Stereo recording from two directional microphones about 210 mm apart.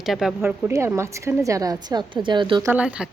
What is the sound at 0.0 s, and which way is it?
Speech, centre (ahead or behind).